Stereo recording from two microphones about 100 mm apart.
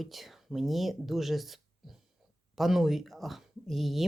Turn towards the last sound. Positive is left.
turn(degrees=0)  # may be behind; listen again after turning